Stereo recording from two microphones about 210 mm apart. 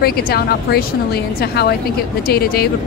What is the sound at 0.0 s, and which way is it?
A woman's voice, 50° left (ahead or behind).